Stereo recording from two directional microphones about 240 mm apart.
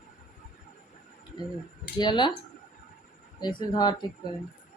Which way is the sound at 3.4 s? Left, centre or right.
Centre.